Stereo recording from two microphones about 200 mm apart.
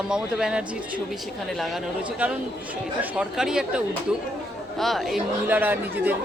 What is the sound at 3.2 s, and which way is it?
Speech, 5° right (ahead or behind).